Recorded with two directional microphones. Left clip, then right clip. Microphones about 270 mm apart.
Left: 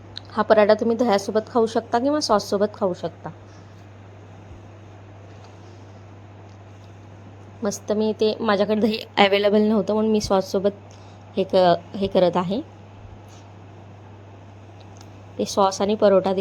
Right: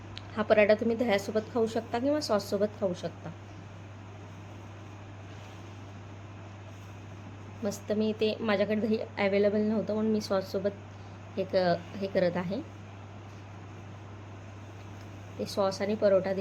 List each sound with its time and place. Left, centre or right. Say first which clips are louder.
0.3 s a woman's voice: left 7 dB; left
7.6 s a woman's voice: left 8 dB; left
15.4 s a woman's voice: left 10 dB; left